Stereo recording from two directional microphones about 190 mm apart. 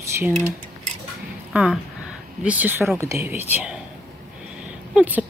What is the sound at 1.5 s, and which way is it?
Speech, 5° right (ahead or behind).